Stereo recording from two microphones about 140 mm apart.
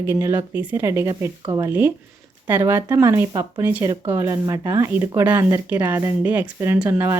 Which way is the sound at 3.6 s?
15° right (ahead or behind).